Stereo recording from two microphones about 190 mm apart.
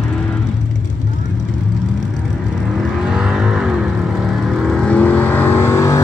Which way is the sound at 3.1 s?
5° right (ahead or behind).